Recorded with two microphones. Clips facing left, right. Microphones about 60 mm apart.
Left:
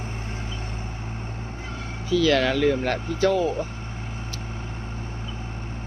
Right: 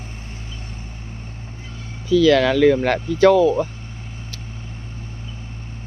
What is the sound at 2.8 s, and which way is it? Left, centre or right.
Speech, right.